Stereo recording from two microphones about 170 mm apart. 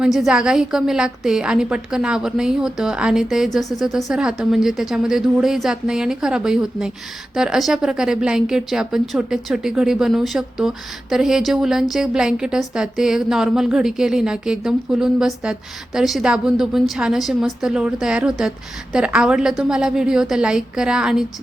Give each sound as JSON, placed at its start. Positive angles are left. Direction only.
{"t": 0.0, "sound": "speech", "side_deg": 0}